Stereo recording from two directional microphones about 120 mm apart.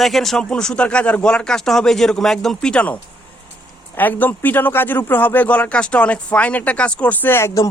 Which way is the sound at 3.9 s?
15° left (ahead or behind).